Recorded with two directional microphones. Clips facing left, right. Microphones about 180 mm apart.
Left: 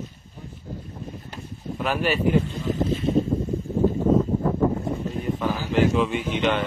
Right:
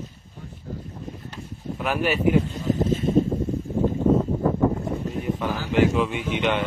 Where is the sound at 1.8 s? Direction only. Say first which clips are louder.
Even; 5° right (ahead or behind).